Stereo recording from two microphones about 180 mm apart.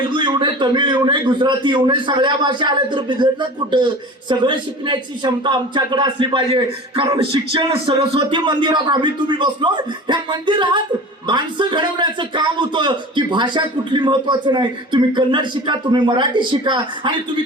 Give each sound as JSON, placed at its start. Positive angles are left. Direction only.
{"t": 0.1, "sound": "speech", "side_deg": -25}